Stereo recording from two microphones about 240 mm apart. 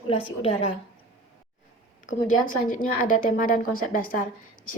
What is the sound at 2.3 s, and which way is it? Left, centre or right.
Speech, left.